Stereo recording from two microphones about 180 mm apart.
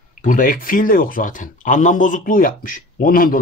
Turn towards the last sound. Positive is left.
turn(degrees=50)  # may be behind; listen again after turning